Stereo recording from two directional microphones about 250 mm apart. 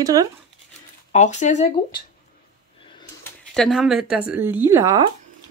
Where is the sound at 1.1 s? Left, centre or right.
Left.